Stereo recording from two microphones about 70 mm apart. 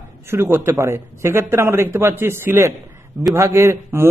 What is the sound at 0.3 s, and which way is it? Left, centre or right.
A man's voice, right.